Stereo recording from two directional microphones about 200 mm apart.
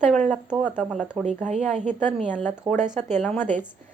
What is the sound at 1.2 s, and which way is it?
Speech, 35° right (ahead or behind).